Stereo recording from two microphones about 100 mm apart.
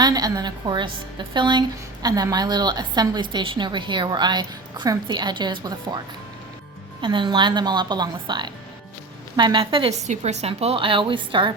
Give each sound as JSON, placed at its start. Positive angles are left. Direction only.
{"t": 0.0, "sound": "a woman's voice", "side_deg": -40}
{"t": 7.0, "sound": "a woman's voice", "side_deg": -55}